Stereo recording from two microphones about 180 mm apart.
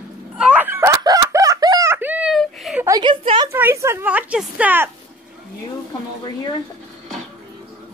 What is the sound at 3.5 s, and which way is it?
A woman's voice, 15° right (ahead or behind).